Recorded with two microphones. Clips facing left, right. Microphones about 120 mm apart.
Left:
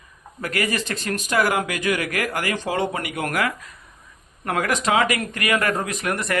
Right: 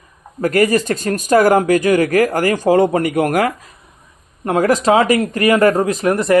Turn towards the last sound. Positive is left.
turn(degrees=-30)  # may be behind; listen again after turning